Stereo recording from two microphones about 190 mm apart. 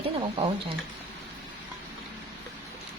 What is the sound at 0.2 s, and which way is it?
Speech, 30° right (ahead or behind).